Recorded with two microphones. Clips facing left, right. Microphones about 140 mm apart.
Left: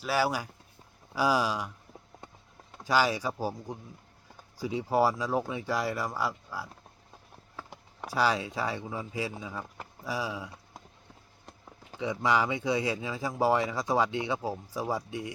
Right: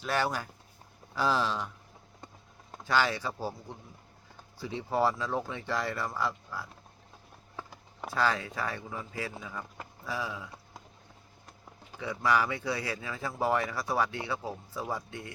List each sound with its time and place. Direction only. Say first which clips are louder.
0.0 s speech: left 2 dB; 5° left (ahead or behind)
2.8 s speech: left 2 dB; 10° left (ahead or behind)
8.1 s speech: left 2 dB; 15° left (ahead or behind)
11.9 s speech: left 1 dB; 20° left (ahead or behind)